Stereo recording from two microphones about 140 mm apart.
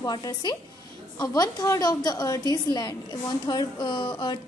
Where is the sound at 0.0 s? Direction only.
30° left (ahead or behind).